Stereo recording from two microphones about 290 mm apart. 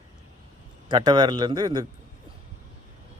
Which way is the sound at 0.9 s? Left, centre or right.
Centre.